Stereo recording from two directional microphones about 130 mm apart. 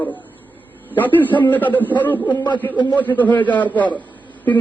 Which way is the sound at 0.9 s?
15° left (ahead or behind).